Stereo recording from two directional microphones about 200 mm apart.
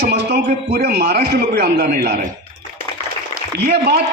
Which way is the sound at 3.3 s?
55° right (ahead or behind).